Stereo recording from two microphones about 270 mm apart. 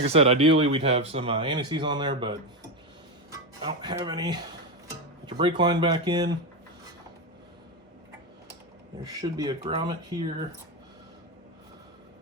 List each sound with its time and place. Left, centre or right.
0.0 s speech: right
3.3 s speech: centre
9.0 s speech: centre